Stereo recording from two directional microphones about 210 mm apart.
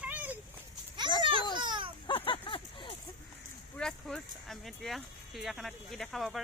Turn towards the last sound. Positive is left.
turn(degrees=0)  # may be behind; listen again after turning